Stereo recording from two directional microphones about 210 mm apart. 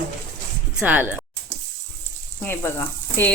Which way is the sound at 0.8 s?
10° right (ahead or behind).